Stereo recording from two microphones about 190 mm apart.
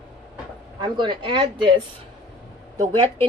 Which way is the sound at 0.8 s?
25° right (ahead or behind).